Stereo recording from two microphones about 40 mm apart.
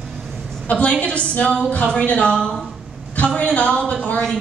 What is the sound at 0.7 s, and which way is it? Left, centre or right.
A woman's voice, left.